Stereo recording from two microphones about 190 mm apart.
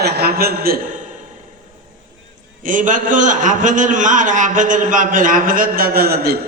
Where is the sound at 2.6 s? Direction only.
45° right (ahead or behind).